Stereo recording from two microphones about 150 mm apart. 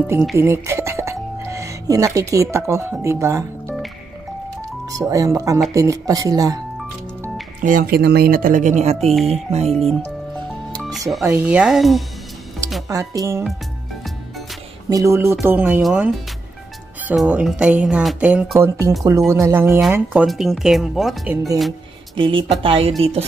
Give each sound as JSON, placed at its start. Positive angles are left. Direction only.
{"t": 0.0, "sound": "speech", "side_deg": -20}
{"t": 0.4, "sound": "music", "side_deg": -20}
{"t": 3.0, "sound": "speech", "side_deg": -20}
{"t": 4.8, "sound": "speech", "side_deg": -25}
{"t": 7.6, "sound": "speech", "side_deg": -70}
{"t": 9.2, "sound": "music", "side_deg": -45}
{"t": 9.7, "sound": "speech", "side_deg": 0}
{"t": 13.1, "sound": "speech", "side_deg": -25}
{"t": 14.9, "sound": "speech", "side_deg": -20}
{"t": 17.1, "sound": "speech", "side_deg": -5}
{"t": 22.1, "sound": "speech", "side_deg": -35}